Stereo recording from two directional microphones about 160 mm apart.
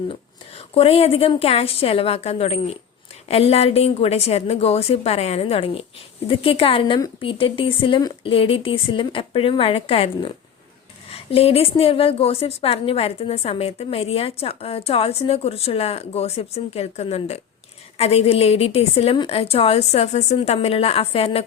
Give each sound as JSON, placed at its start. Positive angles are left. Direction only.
{"t": 0.1, "sound": "a woman's voice", "side_deg": 35}